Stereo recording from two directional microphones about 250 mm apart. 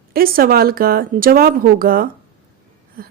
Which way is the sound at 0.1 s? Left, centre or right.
Right.